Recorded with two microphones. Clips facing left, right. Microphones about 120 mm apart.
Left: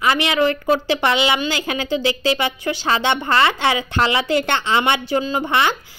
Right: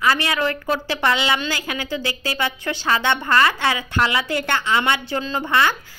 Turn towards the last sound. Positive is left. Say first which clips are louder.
# left 1 dB
turn(degrees=20)  # may be behind; listen again after turning